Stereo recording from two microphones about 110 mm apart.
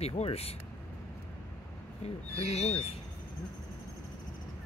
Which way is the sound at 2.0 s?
70° left (ahead or behind).